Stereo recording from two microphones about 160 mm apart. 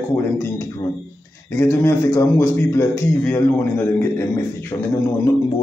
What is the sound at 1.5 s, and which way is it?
A man's voice, 15° left (ahead or behind).